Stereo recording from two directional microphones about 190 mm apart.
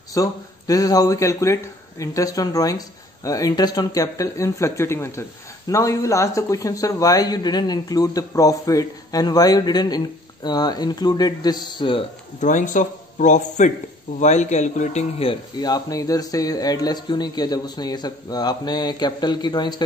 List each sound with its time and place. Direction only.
0.1 s speech: 20° left (ahead or behind)
12.4 s speech: 40° left (ahead or behind); by 19.8 s 20° left (ahead or behind)